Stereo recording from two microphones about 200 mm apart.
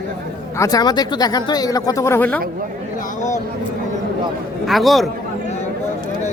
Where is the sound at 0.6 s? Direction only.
20° left (ahead or behind).